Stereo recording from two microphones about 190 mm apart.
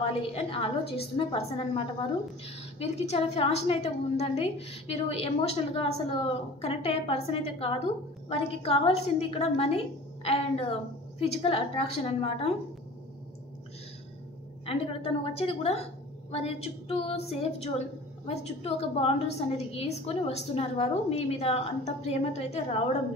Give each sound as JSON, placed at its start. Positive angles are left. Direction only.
{"t": 0.3, "sound": "a woman's voice", "side_deg": 30}
{"t": 14.7, "sound": "a woman's voice", "side_deg": 30}